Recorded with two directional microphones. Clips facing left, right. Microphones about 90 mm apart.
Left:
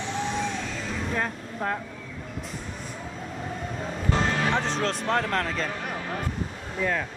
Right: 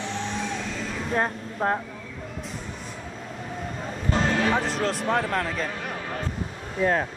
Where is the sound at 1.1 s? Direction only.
30° right (ahead or behind).